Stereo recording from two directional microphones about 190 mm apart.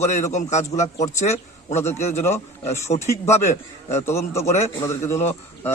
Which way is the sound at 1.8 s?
15° left (ahead or behind).